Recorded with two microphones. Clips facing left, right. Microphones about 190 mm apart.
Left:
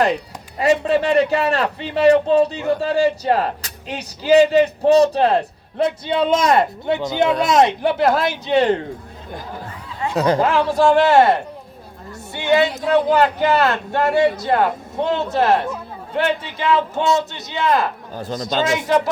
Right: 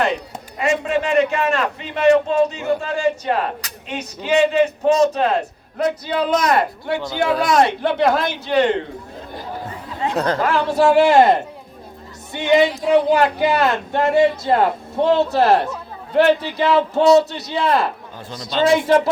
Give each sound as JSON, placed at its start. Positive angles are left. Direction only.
{"t": 0.6, "sound": "a man's voice", "side_deg": 35}
{"t": 7.9, "sound": "speech", "side_deg": 5}
{"t": 8.4, "sound": "speech", "side_deg": 30}
{"t": 10.2, "sound": "speech", "side_deg": 15}
{"t": 10.7, "sound": "speech", "side_deg": 0}
{"t": 11.0, "sound": "speech", "side_deg": -15}
{"t": 18.1, "sound": "a man's voice", "side_deg": 40}